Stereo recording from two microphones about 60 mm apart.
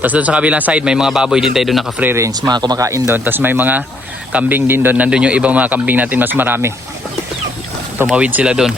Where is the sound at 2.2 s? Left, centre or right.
Right.